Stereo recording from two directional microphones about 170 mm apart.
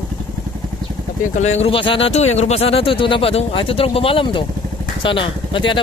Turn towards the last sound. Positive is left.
turn(degrees=30)  # may be behind; listen again after turning